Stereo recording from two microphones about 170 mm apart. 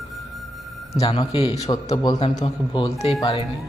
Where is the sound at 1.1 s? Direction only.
35° left (ahead or behind).